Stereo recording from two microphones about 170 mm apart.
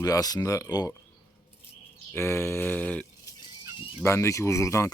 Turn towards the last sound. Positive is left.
turn(degrees=15)  # may be behind; listen again after turning